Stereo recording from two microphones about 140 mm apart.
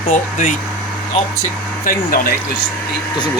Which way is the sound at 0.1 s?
60° left (ahead or behind).